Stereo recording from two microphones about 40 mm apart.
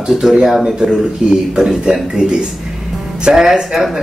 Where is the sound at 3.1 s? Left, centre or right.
Right.